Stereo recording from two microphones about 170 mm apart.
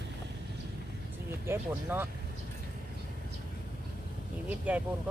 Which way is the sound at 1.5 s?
10° right (ahead or behind).